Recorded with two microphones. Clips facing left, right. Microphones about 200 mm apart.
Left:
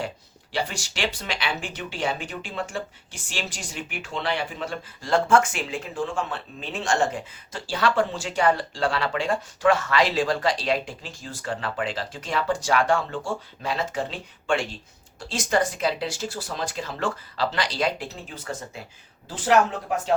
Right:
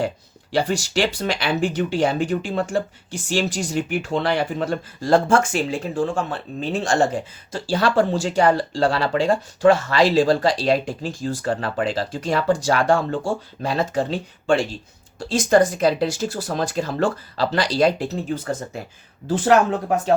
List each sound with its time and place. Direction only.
0.5 s speech: 40° right (ahead or behind)